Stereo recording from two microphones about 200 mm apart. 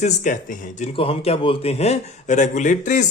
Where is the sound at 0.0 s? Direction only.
40° left (ahead or behind).